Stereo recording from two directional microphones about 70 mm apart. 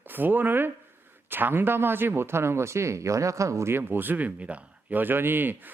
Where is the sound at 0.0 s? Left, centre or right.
Right.